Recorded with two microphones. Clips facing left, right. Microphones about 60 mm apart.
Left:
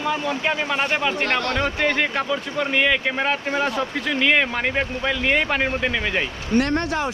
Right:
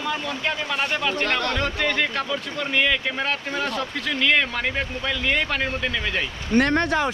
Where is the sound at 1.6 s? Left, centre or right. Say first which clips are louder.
Left 2 dB; centre.